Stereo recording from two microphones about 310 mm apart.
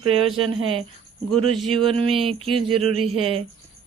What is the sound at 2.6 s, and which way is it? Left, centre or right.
Speech, right.